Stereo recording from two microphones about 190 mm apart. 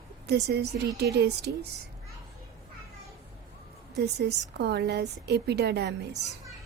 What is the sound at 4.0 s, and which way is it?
A woman's voice, 60° right (ahead or behind).